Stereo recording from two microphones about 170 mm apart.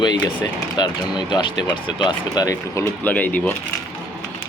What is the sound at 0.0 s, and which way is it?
Speech, 25° left (ahead or behind).